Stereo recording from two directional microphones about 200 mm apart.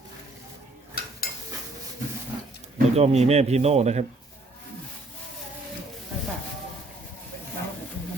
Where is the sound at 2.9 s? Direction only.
30° right (ahead or behind).